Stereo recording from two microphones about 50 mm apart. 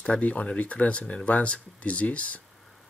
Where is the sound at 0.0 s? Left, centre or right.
Left.